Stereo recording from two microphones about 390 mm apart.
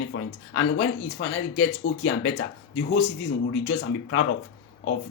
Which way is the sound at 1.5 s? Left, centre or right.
Left.